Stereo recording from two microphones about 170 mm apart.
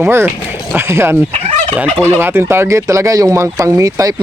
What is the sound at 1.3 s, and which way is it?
Fowl, 35° right (ahead or behind).